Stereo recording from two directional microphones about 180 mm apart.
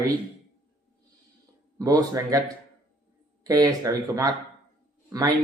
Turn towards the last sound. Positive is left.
turn(degrees=-20)  # may be behind; listen again after turning